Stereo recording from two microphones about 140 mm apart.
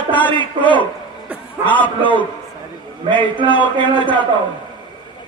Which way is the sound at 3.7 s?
35° right (ahead or behind).